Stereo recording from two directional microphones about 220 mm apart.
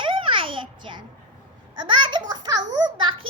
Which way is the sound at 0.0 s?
25° right (ahead or behind).